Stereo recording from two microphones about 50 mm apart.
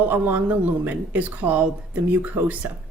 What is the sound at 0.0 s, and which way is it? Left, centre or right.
Speech, right.